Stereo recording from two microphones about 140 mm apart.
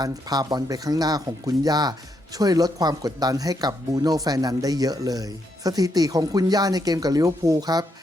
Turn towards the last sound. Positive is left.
turn(degrees=-30)  # may be behind; listen again after turning